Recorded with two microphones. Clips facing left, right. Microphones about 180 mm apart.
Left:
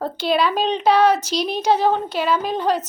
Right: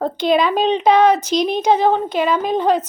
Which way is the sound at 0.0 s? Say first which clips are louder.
Right 4 dB; 5° left (ahead or behind).